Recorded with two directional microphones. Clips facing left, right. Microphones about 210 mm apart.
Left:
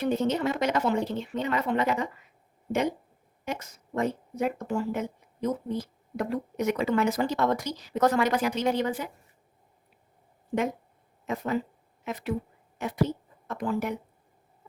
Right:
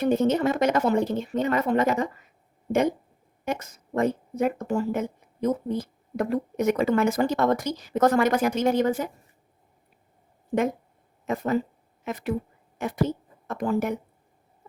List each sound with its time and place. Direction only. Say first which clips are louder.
0.0 s speech: right 4 dB; 50° right (ahead or behind)
3.4 s speech: right 5 dB; 50° right (ahead or behind)
11.3 s speech: right 4 dB; 45° right (ahead or behind)